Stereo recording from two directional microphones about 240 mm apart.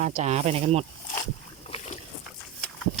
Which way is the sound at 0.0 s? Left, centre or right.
Right.